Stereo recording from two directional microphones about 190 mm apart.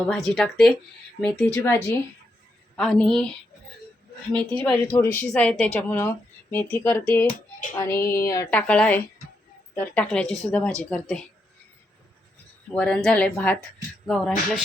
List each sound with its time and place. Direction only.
0.1 s speech: centre (ahead or behind)
2.7 s speech: centre (ahead or behind)
4.3 s a woman's voice: 5° left (ahead or behind)
12.7 s speech: 5° left (ahead or behind)